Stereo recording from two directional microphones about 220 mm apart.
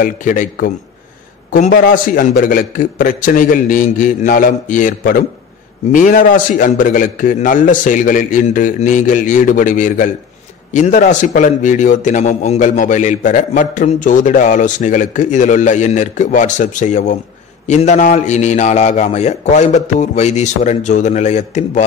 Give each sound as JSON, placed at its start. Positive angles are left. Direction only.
{"t": 0.0, "sound": "a man's voice", "side_deg": 35}